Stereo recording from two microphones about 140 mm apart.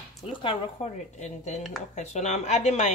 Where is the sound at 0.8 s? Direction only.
55° left (ahead or behind).